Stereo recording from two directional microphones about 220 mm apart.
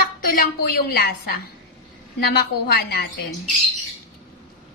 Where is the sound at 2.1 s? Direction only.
45° left (ahead or behind).